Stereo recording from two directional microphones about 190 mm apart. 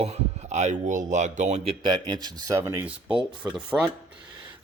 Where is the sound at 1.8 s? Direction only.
25° right (ahead or behind).